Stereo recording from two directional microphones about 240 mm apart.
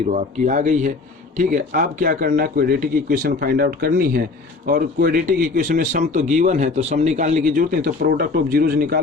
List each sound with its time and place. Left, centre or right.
0.1 s speech: right